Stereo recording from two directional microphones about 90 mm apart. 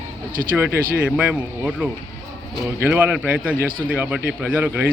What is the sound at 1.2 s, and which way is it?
A man's voice, 15° right (ahead or behind).